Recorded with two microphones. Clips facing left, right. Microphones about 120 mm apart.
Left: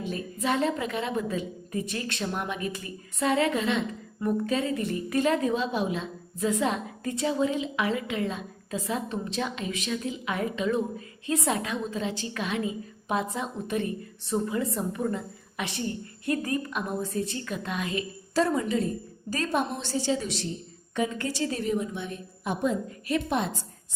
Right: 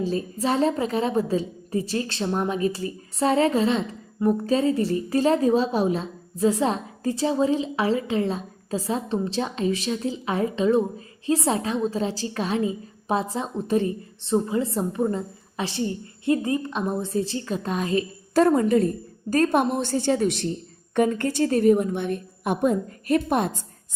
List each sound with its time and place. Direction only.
0.0 s a woman's voice: 30° right (ahead or behind)
18.3 s a woman's voice: 50° right (ahead or behind)